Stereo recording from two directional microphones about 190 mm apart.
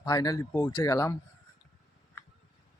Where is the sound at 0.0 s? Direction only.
20° left (ahead or behind).